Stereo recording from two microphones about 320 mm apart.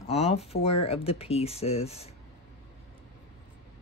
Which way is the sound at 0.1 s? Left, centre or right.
Centre.